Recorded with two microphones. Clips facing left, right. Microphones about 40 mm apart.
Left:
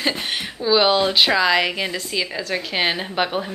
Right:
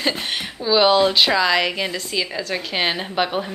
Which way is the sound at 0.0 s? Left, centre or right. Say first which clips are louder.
Even; centre.